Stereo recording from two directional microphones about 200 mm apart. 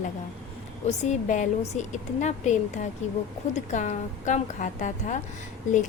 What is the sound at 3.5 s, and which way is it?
A woman's voice, 35° left (ahead or behind).